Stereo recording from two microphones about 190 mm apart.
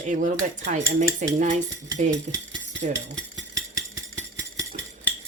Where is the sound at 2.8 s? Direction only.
35° right (ahead or behind).